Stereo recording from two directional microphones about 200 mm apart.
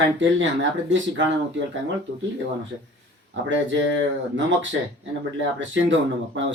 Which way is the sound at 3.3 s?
70° right (ahead or behind).